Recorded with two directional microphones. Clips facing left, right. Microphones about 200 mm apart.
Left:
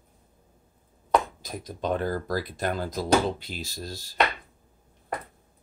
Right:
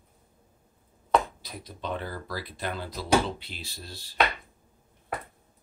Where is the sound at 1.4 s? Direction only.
45° left (ahead or behind).